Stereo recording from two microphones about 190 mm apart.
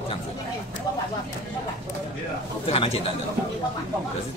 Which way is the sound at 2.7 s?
30° left (ahead or behind).